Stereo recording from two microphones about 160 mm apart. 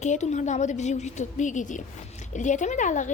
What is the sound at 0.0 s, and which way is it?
A woman's voice, 45° left (ahead or behind).